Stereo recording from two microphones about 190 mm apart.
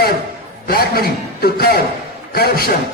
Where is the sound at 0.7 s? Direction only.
50° left (ahead or behind).